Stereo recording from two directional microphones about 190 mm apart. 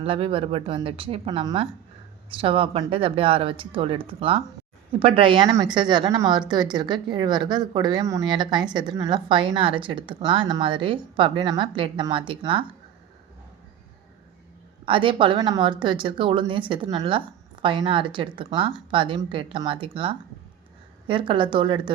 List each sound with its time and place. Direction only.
0.0 s a woman's voice: 30° right (ahead or behind)
14.8 s a woman's voice: 25° right (ahead or behind)